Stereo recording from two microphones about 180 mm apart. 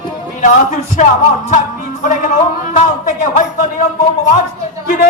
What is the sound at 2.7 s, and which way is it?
Speech, 45° left (ahead or behind).